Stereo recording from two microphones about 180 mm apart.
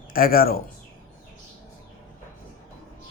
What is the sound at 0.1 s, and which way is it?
Speech, 55° left (ahead or behind).